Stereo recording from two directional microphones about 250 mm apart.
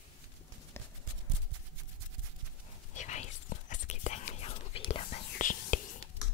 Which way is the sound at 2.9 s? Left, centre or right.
Left.